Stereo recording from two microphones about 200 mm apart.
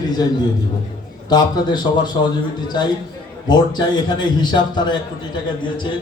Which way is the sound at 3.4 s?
20° left (ahead or behind).